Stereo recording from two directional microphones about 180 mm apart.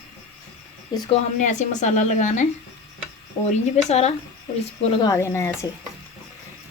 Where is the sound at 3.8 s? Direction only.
35° left (ahead or behind).